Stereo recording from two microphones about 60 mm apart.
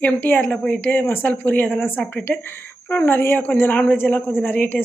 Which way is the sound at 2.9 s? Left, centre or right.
Left.